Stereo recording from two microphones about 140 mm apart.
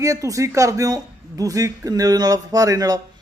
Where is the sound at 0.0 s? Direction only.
25° right (ahead or behind).